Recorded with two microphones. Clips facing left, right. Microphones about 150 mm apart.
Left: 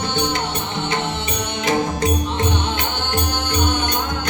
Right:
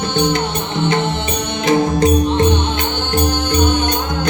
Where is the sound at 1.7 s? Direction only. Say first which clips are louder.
Right 7 dB; 25° right (ahead or behind).